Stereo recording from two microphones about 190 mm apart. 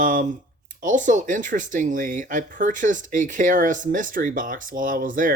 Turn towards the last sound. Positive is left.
turn(degrees=-45)  # may be behind; listen again after turning